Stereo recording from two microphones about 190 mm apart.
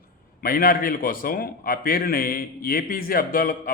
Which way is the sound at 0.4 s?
50° left (ahead or behind).